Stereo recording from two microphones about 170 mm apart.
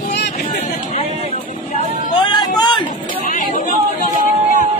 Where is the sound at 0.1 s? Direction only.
75° left (ahead or behind).